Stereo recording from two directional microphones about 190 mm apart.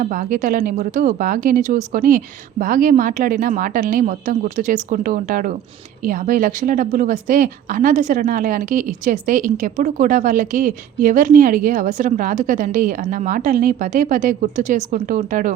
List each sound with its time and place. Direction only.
0.0 s a woman's voice: 45° right (ahead or behind)